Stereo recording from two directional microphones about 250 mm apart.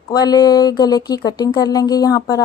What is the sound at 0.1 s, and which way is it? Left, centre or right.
A woman's voice, centre.